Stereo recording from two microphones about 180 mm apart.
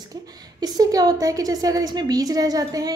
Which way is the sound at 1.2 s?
20° right (ahead or behind).